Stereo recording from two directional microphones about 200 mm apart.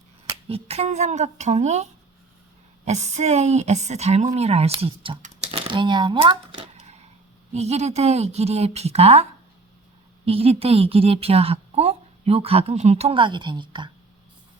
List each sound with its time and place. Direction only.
0.4 s a woman's voice: 30° right (ahead or behind)
10.2 s a woman's voice: 30° right (ahead or behind)